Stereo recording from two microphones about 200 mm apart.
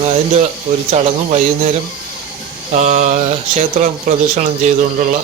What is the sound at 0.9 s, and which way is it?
Mantra, 30° right (ahead or behind).